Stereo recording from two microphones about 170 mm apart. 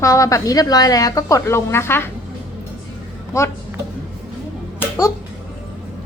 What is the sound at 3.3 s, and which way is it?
Speech, 15° left (ahead or behind).